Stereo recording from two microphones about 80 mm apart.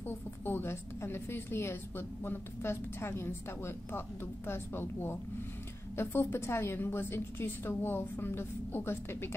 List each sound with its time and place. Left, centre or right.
0.0 s a woman's voice: left